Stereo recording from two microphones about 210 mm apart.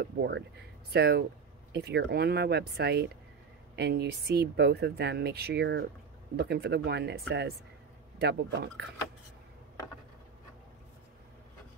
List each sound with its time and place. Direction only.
0.0 s speech: 50° right (ahead or behind)